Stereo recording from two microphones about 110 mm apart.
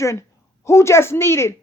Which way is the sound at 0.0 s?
25° left (ahead or behind).